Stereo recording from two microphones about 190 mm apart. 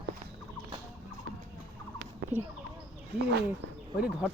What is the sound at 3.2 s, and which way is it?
Speech, 60° right (ahead or behind).